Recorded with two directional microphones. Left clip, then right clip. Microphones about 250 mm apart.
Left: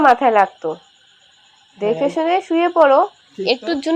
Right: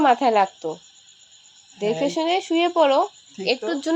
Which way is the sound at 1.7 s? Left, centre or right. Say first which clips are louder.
Left 5 dB; right.